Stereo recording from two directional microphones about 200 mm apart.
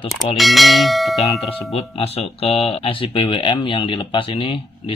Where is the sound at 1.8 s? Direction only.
30° left (ahead or behind).